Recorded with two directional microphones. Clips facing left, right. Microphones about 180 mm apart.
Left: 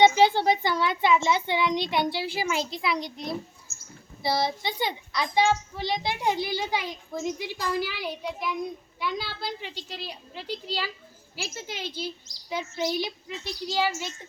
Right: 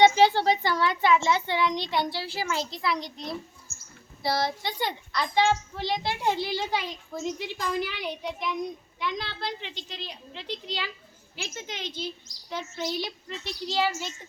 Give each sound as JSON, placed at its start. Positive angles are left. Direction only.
{"t": 0.2, "sound": "a child's voice", "side_deg": 15}
{"t": 3.7, "sound": "a sound", "side_deg": -55}
{"t": 4.3, "sound": "a child's voice", "side_deg": 20}